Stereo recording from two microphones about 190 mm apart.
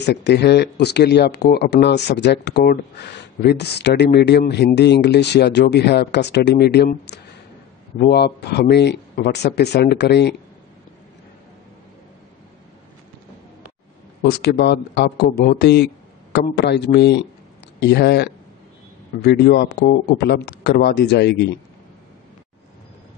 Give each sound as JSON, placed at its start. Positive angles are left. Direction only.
{"t": 0.0, "sound": "speech", "side_deg": 60}
{"t": 14.4, "sound": "speech", "side_deg": 65}